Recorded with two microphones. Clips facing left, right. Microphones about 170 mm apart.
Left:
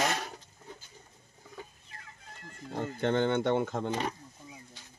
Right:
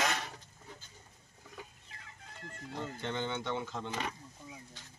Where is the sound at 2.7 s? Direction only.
55° left (ahead or behind).